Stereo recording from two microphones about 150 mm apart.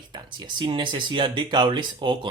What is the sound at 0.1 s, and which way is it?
Speech, 30° right (ahead or behind).